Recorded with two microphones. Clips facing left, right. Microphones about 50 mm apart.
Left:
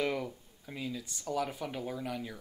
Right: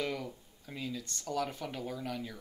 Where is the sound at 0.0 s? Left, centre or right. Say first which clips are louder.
Left 3 dB; centre.